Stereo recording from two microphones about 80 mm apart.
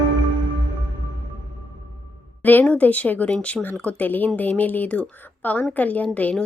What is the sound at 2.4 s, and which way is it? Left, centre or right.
Speech, left.